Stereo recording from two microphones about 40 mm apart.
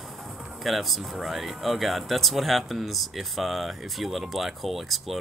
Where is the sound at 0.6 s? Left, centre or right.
Centre.